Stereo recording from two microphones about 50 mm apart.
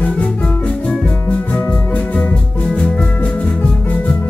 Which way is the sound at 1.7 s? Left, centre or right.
Left.